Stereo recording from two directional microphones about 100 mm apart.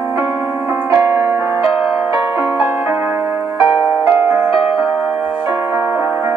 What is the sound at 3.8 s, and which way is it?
Music, 25° right (ahead or behind).